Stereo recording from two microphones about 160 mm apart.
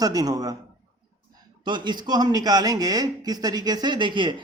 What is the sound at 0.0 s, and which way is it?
Speech, 25° right (ahead or behind).